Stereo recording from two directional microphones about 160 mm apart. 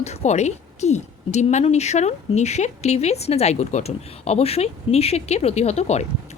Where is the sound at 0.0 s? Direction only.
45° left (ahead or behind).